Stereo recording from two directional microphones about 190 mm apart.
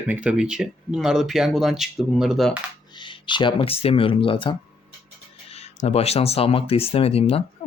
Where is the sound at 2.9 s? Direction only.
25° left (ahead or behind).